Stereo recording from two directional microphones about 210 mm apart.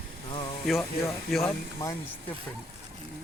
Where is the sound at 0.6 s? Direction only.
Centre (ahead or behind).